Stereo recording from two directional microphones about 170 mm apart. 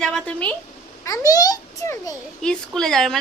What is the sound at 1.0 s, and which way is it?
A child's voice, 20° left (ahead or behind).